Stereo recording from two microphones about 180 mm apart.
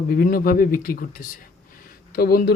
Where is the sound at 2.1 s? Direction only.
55° left (ahead or behind).